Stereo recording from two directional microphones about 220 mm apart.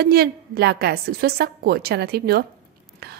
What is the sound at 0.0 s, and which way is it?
A woman's voice, 45° right (ahead or behind).